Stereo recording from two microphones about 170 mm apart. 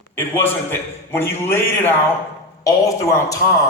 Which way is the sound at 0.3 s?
10° left (ahead or behind).